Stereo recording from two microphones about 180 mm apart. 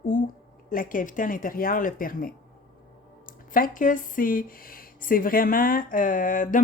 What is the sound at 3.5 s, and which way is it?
Speech, 50° left (ahead or behind).